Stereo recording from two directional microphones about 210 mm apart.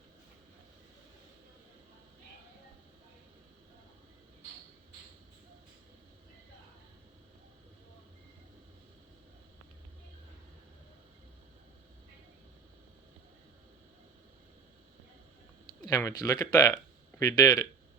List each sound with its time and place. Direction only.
15.9 s speech: 15° left (ahead or behind)